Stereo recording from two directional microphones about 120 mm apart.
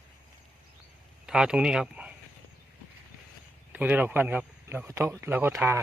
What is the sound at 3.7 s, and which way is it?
Speech, 15° right (ahead or behind).